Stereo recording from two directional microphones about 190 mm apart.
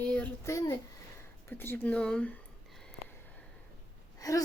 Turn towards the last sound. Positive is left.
turn(degrees=20)  # may be behind; listen again after turning